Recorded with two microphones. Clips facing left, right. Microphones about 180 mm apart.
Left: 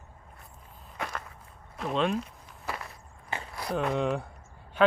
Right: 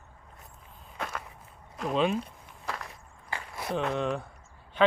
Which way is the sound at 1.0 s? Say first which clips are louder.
Even; centre (ahead or behind).